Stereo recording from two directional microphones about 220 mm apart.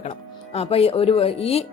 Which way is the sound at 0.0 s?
25° left (ahead or behind).